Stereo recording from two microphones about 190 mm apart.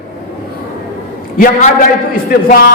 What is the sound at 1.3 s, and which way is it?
A man's voice, 50° left (ahead or behind).